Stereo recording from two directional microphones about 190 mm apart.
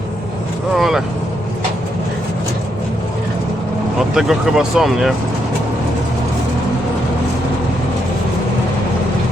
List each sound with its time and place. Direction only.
0.7 s vehicle: centre (ahead or behind)
4.1 s speech: centre (ahead or behind)